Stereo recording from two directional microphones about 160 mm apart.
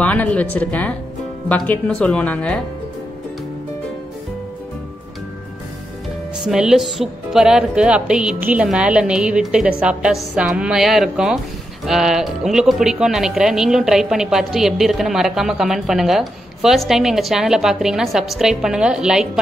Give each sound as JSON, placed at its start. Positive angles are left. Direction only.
{"t": 0.0, "sound": "speech", "side_deg": 10}
{"t": 6.4, "sound": "speech", "side_deg": -5}